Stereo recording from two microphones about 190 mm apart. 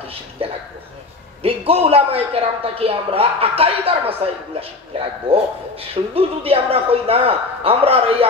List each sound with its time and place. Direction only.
0.4 s a man's voice: 30° right (ahead or behind)